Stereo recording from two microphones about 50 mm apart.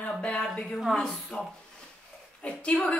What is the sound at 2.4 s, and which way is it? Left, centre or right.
Speech, left.